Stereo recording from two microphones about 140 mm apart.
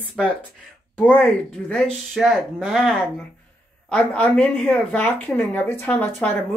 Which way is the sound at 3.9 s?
10° left (ahead or behind).